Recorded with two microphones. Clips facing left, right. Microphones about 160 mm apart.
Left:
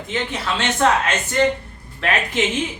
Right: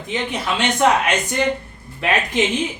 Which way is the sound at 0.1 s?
15° right (ahead or behind).